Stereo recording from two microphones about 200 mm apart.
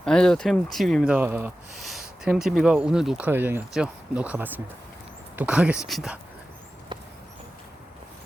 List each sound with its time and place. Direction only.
0.0 s speech: 5° left (ahead or behind)